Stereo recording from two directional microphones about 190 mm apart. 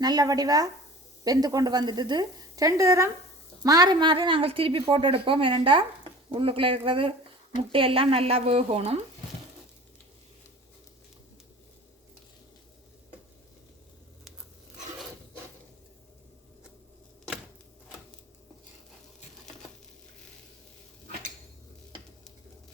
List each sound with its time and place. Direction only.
0.0 s a woman's voice: 20° right (ahead or behind)